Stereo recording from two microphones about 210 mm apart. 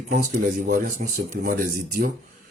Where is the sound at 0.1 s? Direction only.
40° right (ahead or behind).